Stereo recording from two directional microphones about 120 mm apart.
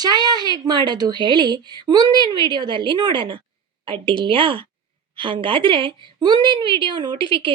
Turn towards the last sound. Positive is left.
turn(degrees=-45)  # may be behind; listen again after turning